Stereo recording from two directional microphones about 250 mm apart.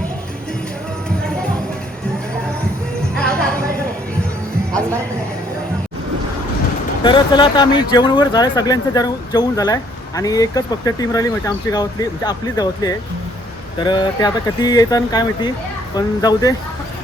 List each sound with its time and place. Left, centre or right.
3.2 s music: centre
7.0 s speech: centre